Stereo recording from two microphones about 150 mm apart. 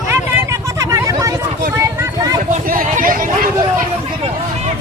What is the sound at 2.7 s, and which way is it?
Vehicle, 65° right (ahead or behind).